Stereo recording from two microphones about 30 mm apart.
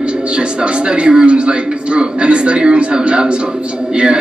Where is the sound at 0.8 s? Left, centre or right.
Right.